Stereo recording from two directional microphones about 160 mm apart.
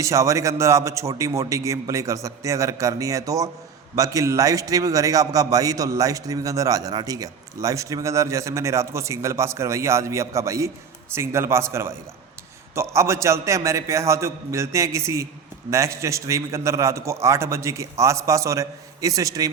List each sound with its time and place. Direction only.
0.0 s a man's voice: 20° right (ahead or behind)